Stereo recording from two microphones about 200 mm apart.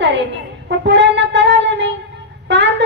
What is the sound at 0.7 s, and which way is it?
Wind instrument, 60° right (ahead or behind).